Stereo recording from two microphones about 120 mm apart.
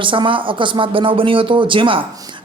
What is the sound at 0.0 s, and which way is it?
Speech, 45° right (ahead or behind).